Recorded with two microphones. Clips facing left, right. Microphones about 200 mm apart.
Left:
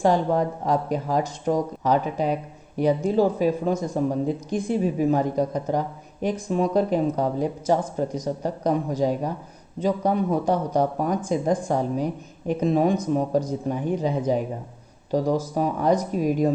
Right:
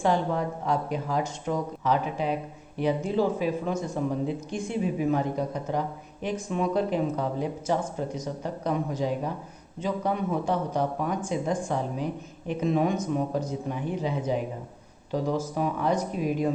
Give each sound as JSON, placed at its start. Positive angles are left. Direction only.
{"t": 0.0, "sound": "speech", "side_deg": 40}